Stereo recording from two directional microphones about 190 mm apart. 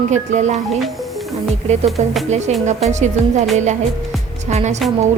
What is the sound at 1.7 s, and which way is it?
Speech, 35° right (ahead or behind).